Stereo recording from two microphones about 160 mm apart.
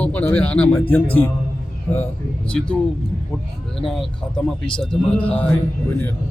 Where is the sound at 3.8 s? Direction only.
Centre (ahead or behind).